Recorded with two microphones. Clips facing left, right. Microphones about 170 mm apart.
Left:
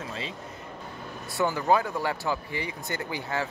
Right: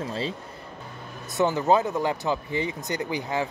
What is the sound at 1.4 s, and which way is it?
Speech, 20° right (ahead or behind).